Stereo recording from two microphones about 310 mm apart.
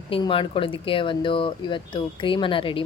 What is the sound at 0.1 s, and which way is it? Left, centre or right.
Speech, centre.